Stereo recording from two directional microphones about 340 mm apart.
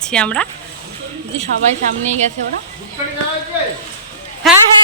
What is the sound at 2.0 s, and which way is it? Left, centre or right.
Speech, centre.